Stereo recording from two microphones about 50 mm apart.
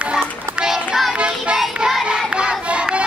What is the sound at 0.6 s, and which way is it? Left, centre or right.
Music, centre.